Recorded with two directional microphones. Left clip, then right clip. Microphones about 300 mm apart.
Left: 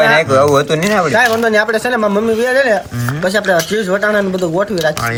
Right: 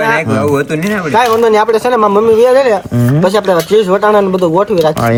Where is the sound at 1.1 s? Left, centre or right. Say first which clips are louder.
Right 6 dB; centre.